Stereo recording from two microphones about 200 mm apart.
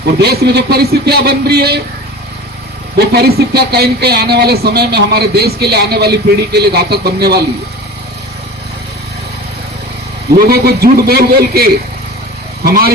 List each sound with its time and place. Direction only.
0.2 s speech: 55° right (ahead or behind)
3.1 s speech: 50° right (ahead or behind)
10.3 s speech: 50° right (ahead or behind)